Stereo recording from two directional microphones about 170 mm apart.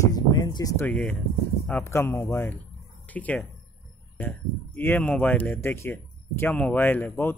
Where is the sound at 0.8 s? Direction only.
10° left (ahead or behind).